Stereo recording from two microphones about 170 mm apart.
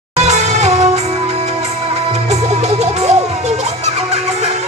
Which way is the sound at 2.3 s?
40° right (ahead or behind).